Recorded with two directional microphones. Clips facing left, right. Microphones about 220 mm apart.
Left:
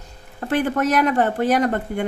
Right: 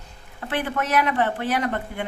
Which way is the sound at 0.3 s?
45° left (ahead or behind).